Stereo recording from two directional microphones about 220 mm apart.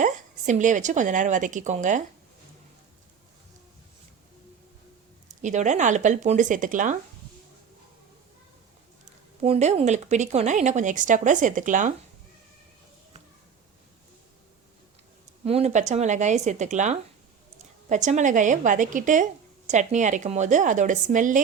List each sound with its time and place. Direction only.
0.0 s a woman's voice: 35° right (ahead or behind)
5.3 s speech: 35° right (ahead or behind)
9.4 s speech: 30° right (ahead or behind)
15.4 s speech: 30° right (ahead or behind)